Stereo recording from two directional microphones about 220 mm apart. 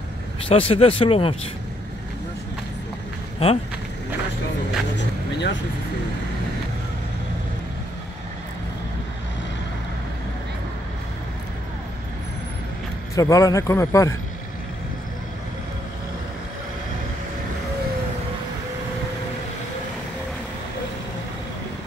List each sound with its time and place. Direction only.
0.5 s speech: 25° left (ahead or behind)
3.4 s speech: 25° left (ahead or behind)
4.9 s vehicle: 55° left (ahead or behind)
13.1 s a man's voice: 15° left (ahead or behind)